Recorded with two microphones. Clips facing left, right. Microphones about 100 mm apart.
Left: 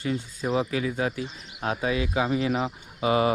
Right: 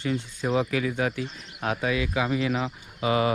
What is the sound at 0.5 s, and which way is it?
Speech, 30° left (ahead or behind).